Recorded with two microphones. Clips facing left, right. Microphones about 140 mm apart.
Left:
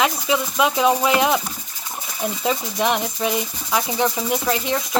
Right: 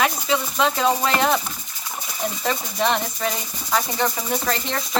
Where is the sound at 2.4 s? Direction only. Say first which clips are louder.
Left 2 dB; 15° left (ahead or behind).